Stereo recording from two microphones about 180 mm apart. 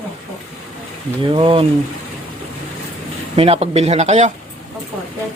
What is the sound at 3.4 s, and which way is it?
Speech, 35° right (ahead or behind).